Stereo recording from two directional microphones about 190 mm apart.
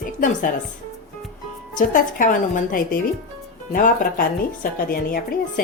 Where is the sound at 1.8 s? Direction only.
45° left (ahead or behind).